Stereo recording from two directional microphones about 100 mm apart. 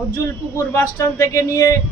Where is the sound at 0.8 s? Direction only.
40° left (ahead or behind).